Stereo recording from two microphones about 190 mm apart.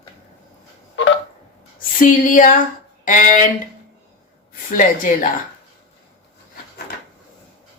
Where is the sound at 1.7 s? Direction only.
45° left (ahead or behind).